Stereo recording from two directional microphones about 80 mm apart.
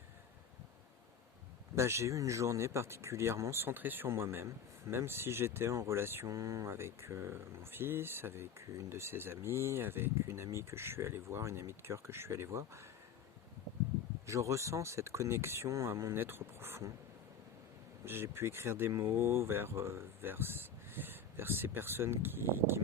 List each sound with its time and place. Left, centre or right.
1.7 s speech: right
14.3 s speech: right
18.0 s speech: right